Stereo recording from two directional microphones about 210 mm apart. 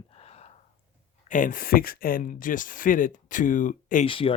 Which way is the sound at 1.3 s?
40° left (ahead or behind).